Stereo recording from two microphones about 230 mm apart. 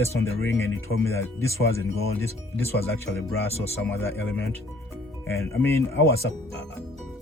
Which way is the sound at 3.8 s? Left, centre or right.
Centre.